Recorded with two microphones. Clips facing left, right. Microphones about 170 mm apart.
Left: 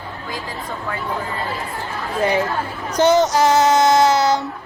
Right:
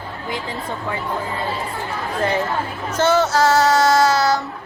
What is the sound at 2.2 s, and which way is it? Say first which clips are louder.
Speech: left 2 dB; 15° left (ahead or behind).